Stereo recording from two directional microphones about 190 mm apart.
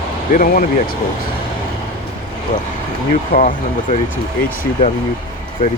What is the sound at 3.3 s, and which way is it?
Speech, 40° left (ahead or behind).